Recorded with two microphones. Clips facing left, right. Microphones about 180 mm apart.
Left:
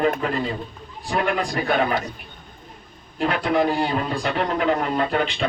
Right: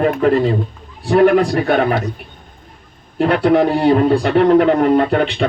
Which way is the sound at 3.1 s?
60° right (ahead or behind).